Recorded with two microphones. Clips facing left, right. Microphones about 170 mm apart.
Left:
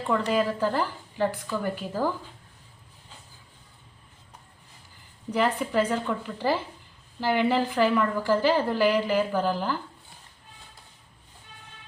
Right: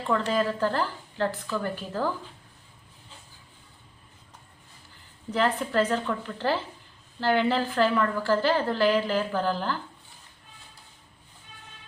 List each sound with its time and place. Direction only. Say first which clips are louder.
0.0 s a woman's voice: left 1 dB; 10° left (ahead or behind)
5.3 s a woman's voice: left 1 dB; 10° left (ahead or behind)